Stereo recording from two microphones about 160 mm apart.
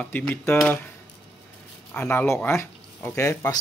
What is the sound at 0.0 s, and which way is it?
Speech, 10° left (ahead or behind).